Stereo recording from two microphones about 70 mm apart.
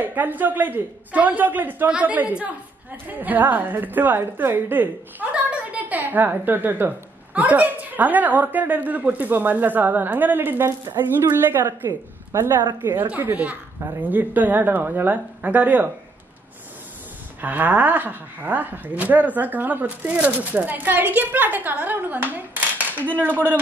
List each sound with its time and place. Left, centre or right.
0.0 s a woman's voice: right
17.4 s speech: right